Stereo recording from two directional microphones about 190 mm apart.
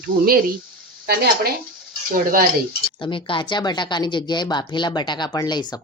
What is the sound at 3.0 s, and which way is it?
Speech, 25° left (ahead or behind).